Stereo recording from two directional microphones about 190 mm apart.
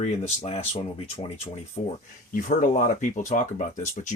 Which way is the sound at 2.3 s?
45° left (ahead or behind).